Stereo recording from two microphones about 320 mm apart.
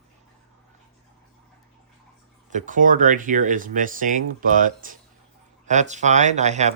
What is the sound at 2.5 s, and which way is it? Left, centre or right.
Speech, right.